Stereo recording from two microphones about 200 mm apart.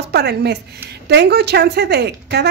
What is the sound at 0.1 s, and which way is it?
A woman's voice, 55° right (ahead or behind).